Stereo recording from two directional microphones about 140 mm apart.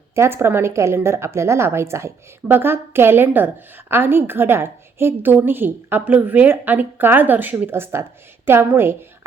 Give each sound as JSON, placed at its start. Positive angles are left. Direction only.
{"t": 0.2, "sound": "a woman's voice", "side_deg": -15}